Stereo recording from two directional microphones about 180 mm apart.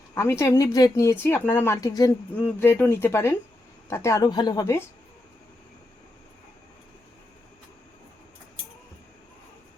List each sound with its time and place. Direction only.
0.1 s a woman's voice: 15° left (ahead or behind)